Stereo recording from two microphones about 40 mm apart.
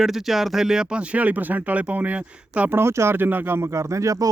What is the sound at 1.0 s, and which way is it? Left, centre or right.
Speech, right.